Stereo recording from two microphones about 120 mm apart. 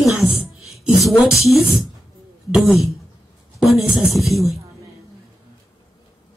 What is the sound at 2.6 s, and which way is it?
Speech, 25° left (ahead or behind).